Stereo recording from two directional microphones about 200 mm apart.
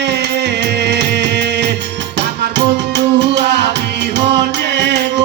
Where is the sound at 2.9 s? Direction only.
60° right (ahead or behind).